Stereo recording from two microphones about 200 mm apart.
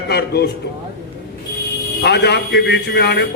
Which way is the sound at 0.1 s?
55° left (ahead or behind).